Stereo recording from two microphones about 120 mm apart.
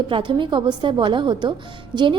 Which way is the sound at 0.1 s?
40° right (ahead or behind).